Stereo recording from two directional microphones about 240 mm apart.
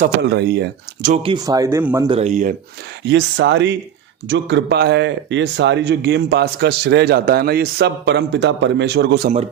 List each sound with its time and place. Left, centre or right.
0.2 s speech: right
1.1 s speech: right
2.0 s speech: right
3.1 s speech: right